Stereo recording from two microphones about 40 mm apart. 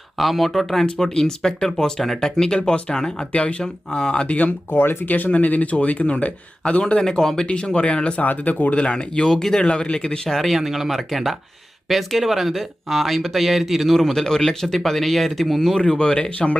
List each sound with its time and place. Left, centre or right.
0.2 s speech: centre
0.9 s speech: centre
4.7 s speech: left
5.0 s speech: left
6.7 s speech: left
7.0 s speech: centre; by 8.2 s left
8.2 s speech: left
8.7 s speech: left
10.2 s speech: centre
16.0 s speech: left